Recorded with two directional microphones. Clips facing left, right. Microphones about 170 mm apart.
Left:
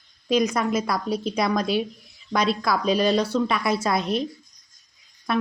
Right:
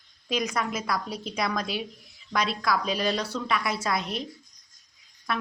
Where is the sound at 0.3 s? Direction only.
30° left (ahead or behind).